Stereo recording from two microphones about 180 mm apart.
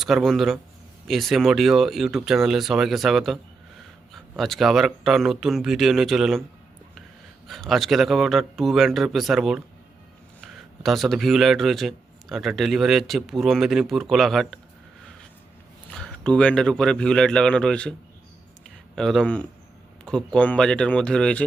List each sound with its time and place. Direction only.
0.0 s speech: centre (ahead or behind)
7.4 s speech: centre (ahead or behind)
16.0 s speech: 5° left (ahead or behind)
18.9 s speech: centre (ahead or behind)